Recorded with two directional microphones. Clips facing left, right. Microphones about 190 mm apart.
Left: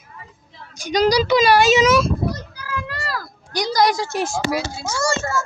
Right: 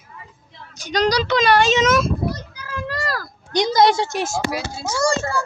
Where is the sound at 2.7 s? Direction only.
35° right (ahead or behind).